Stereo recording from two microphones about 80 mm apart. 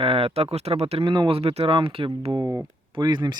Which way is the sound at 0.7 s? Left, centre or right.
Right.